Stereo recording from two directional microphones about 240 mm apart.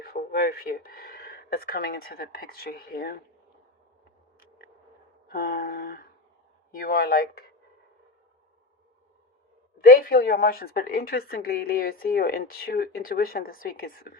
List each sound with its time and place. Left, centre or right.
0.0 s speech: left
4.4 s a sound: left
5.3 s a woman's voice: left
9.8 s a woman's voice: left